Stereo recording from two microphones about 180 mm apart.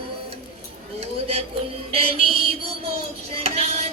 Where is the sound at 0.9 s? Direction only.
35° right (ahead or behind).